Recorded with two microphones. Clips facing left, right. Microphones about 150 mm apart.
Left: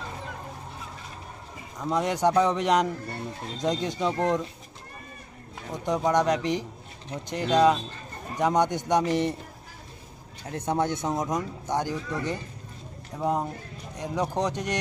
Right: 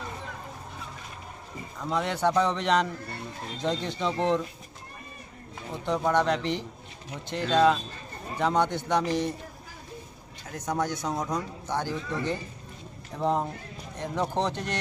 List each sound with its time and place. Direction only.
1.8 s speech: 15° left (ahead or behind)
5.7 s speech: 15° left (ahead or behind)
10.5 s speech: 25° left (ahead or behind)